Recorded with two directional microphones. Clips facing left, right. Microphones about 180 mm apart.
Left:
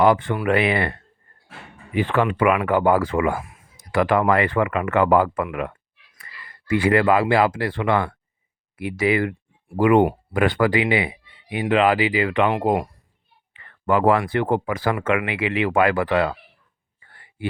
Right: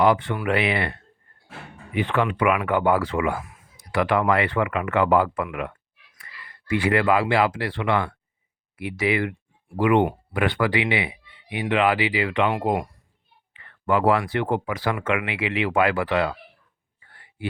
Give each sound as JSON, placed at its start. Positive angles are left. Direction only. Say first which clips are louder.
{"t": 0.0, "sound": "speech", "louder": "left 2 dB", "side_deg": 50}
{"t": 2.0, "sound": "speech", "louder": "left 3 dB", "side_deg": 45}
{"t": 17.1, "sound": "a sound", "louder": "left 1 dB", "side_deg": 50}